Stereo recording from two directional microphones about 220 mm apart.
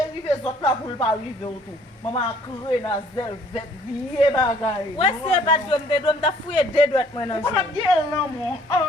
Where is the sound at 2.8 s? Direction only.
20° left (ahead or behind).